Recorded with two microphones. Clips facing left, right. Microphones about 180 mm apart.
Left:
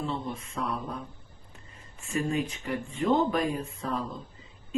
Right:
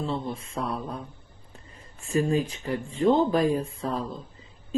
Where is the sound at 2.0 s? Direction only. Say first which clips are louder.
Right 5 dB; 35° right (ahead or behind).